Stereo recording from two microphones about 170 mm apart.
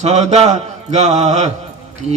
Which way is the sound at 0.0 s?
40° right (ahead or behind).